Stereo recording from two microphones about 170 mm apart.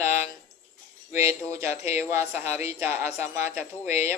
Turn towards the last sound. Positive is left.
turn(degrees=-15)  # may be behind; listen again after turning